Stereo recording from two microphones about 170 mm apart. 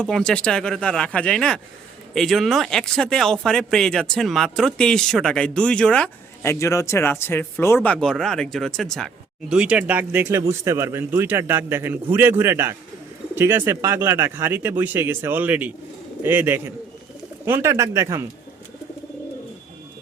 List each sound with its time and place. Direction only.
0.0 s speech: 5° left (ahead or behind)
7.9 s speech: centre (ahead or behind); by 18.3 s 15° right (ahead or behind)